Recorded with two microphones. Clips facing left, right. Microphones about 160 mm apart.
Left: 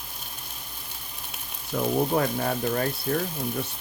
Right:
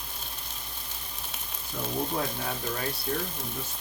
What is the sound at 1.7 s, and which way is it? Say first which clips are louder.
Frying: left 9 dB; 70° left (ahead or behind).